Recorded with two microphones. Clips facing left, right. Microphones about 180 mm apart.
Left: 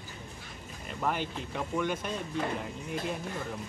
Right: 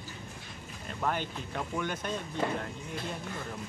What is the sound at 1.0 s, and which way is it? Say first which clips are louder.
A woman's voice: left 1 dB; centre (ahead or behind).